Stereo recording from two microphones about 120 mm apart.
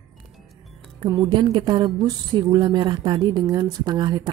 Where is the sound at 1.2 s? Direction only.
45° right (ahead or behind).